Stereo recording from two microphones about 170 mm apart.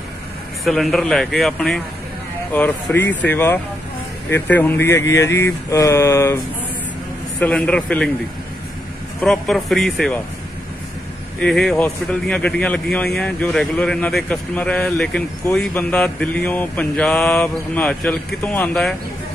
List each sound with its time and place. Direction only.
0.7 s speech: centre (ahead or behind)
9.2 s speech: centre (ahead or behind)
11.3 s speech: 5° left (ahead or behind)